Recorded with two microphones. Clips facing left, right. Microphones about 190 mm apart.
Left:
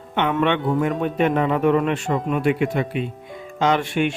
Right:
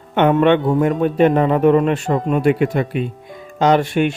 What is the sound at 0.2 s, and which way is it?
Speech, 45° right (ahead or behind).